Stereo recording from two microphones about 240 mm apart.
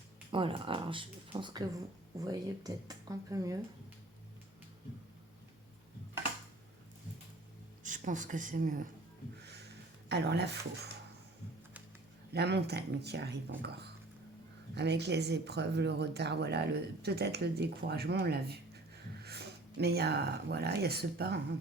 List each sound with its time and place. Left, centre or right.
0.3 s speech: right
7.9 s speech: right
10.1 s speech: right
12.3 s speech: right
14.8 s speech: right